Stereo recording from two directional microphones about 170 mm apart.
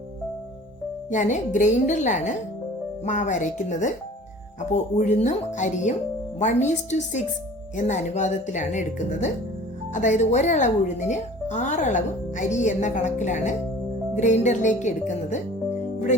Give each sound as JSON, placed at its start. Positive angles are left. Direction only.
{"t": 1.1, "sound": "speech", "side_deg": 45}